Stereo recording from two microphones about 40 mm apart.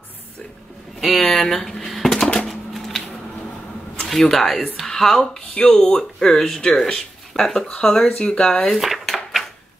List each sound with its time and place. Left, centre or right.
0.9 s speech: centre
1.9 s a sound: centre
2.1 s a sound: centre
4.1 s speech: centre
8.0 s speech: left
8.3 s speech: centre
8.7 s dishes: centre